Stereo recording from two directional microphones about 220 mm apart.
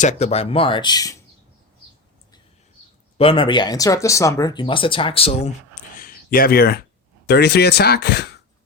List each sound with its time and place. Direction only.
0.0 s speech: 30° left (ahead or behind)
3.2 s speech: 25° left (ahead or behind); by 8.3 s 45° left (ahead or behind)